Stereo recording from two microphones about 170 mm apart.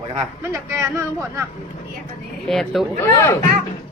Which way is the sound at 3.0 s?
15° left (ahead or behind).